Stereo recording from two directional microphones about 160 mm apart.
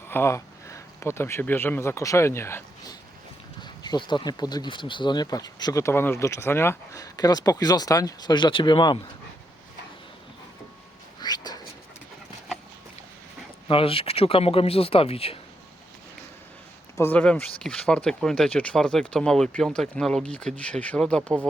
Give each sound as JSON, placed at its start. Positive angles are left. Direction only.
{"t": 0.1, "sound": "speech", "side_deg": 15}
{"t": 11.2, "sound": "a sound", "side_deg": 25}
{"t": 13.7, "sound": "speech", "side_deg": 35}
{"t": 17.0, "sound": "speech", "side_deg": 10}